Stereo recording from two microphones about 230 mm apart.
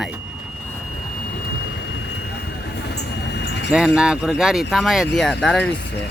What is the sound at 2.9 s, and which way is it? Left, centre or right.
Vehicle, left.